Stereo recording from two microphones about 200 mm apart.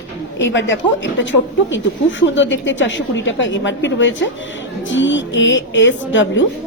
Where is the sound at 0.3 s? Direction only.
70° left (ahead or behind).